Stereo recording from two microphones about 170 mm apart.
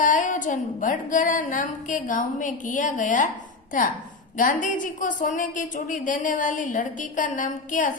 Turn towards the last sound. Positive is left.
turn(degrees=50)  # may be behind; listen again after turning